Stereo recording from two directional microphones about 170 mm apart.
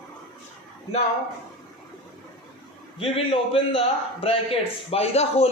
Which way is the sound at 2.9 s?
35° left (ahead or behind).